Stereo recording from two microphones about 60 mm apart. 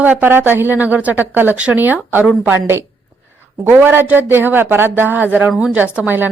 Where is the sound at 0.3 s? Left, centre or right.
Right.